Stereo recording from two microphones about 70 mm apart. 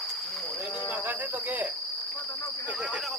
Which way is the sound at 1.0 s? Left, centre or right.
Right.